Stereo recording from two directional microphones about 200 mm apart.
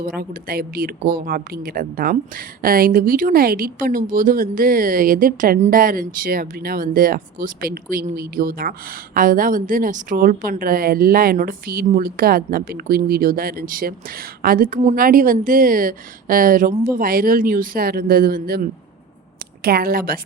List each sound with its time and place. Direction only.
0.0 s speech: 45° right (ahead or behind)